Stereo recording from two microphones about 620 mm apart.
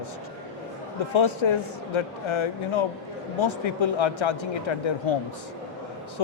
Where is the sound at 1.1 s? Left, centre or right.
Left.